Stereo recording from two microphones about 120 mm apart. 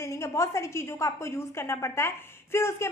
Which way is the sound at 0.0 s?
25° left (ahead or behind).